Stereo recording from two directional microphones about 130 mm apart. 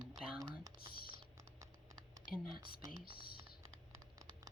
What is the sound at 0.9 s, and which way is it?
Typing, 40° right (ahead or behind).